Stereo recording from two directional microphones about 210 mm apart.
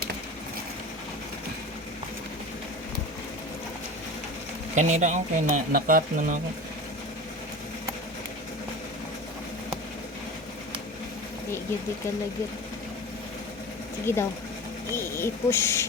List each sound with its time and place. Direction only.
4.7 s speech: 35° right (ahead or behind)
14.1 s speech: 10° left (ahead or behind)